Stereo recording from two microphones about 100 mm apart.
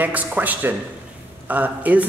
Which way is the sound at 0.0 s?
15° right (ahead or behind).